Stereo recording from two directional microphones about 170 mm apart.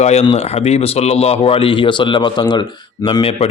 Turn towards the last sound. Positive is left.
turn(degrees=30)  # may be behind; listen again after turning